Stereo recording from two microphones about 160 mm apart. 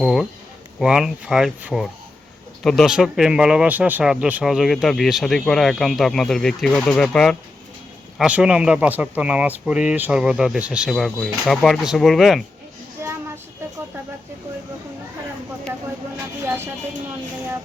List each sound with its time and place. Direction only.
0.0 s speech: centre (ahead or behind)
13.0 s child singing: 15° right (ahead or behind)